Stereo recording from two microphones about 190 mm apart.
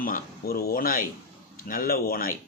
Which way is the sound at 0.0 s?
50° left (ahead or behind).